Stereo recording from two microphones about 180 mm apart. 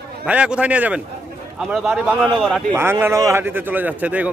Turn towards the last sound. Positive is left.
turn(degrees=-10)  # may be behind; listen again after turning